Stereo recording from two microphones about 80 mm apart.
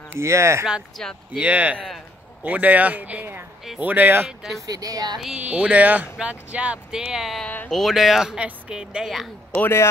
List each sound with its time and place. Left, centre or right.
0.2 s speech: right
1.0 s speech: centre
1.4 s speech: centre
4.3 s speech: centre
4.6 s speech: right
5.4 s speech: centre
7.4 s speech: centre
7.7 s speech: centre
9.5 s speech: left